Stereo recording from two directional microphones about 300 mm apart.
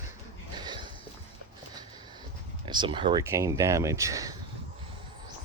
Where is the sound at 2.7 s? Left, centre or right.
Centre.